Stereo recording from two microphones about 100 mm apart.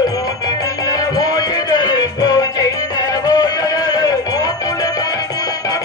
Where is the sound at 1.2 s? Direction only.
40° left (ahead or behind).